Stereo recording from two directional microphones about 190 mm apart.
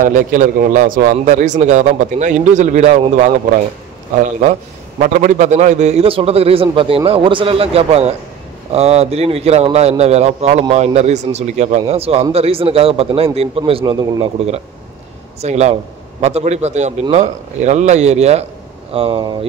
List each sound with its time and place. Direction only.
0.0 s a man's voice: 45° right (ahead or behind)
5.0 s a man's voice: 40° right (ahead or behind)